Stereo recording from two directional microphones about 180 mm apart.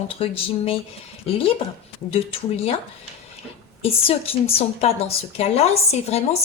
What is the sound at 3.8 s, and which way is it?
Speech, 35° left (ahead or behind).